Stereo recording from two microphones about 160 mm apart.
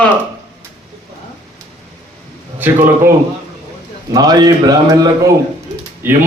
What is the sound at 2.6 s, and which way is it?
Speech, 15° right (ahead or behind).